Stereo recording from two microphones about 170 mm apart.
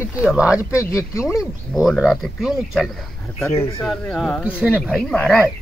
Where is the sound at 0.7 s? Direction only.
20° left (ahead or behind).